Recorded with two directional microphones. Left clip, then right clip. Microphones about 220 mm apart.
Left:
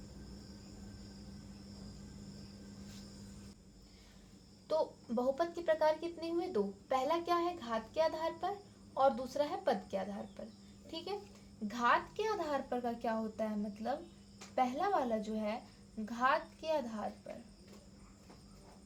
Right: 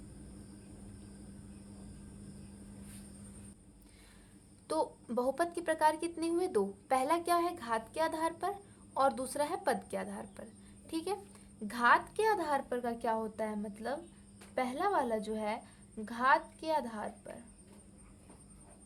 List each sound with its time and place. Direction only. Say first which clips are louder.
4.7 s a woman's voice: right 1 dB; 35° right (ahead or behind)
11.7 s a woman's voice: right 4 dB; 30° right (ahead or behind)